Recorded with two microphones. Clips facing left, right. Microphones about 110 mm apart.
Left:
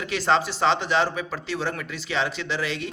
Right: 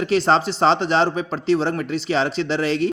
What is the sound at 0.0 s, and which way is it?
Speech, 35° right (ahead or behind).